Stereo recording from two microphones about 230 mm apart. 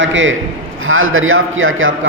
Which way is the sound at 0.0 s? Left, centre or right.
Right.